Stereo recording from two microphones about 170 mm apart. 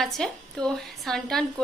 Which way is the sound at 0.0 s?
5° left (ahead or behind).